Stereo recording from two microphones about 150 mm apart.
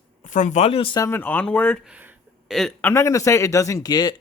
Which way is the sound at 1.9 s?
10° right (ahead or behind).